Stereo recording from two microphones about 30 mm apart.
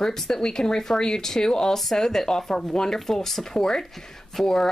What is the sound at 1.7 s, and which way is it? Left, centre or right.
Speech, centre.